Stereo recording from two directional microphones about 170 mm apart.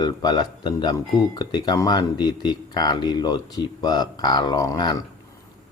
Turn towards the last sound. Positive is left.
turn(degrees=25)  # may be behind; listen again after turning